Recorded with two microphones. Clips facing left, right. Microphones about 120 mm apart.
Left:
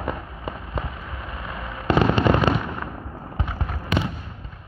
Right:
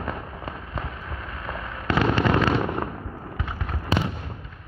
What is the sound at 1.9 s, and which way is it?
Fireworks, 20° left (ahead or behind).